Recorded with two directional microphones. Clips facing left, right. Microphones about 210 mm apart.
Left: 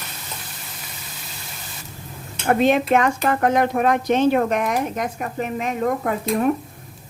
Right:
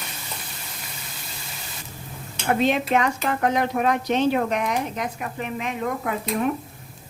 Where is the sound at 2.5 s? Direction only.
50° left (ahead or behind).